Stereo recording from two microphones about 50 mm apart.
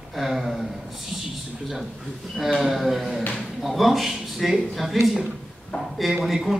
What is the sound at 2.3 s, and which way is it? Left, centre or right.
Speech, centre.